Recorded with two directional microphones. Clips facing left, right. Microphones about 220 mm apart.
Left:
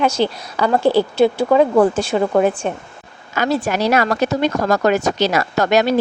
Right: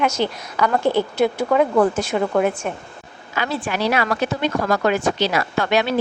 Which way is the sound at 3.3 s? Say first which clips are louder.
Left 5 dB; 45° left (ahead or behind).